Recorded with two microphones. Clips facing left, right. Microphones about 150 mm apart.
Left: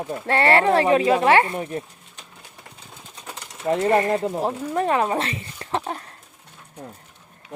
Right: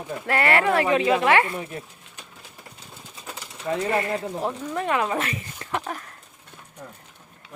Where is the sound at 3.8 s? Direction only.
35° left (ahead or behind).